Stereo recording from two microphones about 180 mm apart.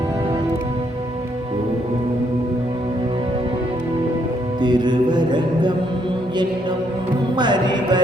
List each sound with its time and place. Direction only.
4.6 s music: 25° right (ahead or behind)
7.3 s music: 25° right (ahead or behind)